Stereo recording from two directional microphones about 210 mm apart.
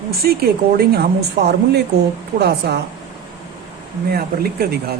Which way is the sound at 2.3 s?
50° right (ahead or behind).